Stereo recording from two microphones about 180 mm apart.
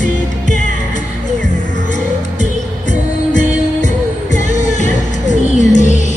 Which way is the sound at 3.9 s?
45° left (ahead or behind).